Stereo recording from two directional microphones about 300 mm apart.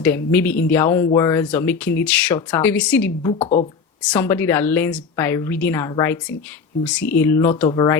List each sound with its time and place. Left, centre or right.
0.0 s speech: centre